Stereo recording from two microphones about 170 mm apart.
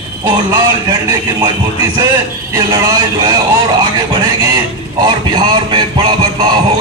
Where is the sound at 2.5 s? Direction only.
20° right (ahead or behind).